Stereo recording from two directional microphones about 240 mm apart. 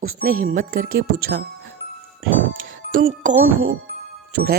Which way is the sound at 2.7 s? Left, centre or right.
Right.